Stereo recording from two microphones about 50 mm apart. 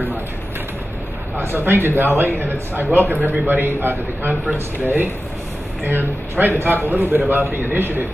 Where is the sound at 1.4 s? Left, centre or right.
Right.